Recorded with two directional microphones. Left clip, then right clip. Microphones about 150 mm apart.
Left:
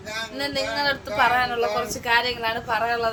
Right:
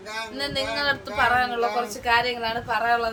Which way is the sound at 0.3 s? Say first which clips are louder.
Left 1 dB; 20° left (ahead or behind).